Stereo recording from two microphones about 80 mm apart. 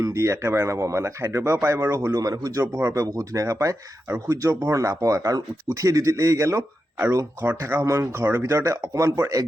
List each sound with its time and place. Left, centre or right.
0.0 s speech: right
2.1 s speech: right
2.7 s speech: right